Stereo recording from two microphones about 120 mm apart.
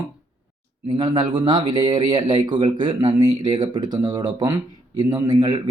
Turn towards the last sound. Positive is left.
turn(degrees=-35)  # may be behind; listen again after turning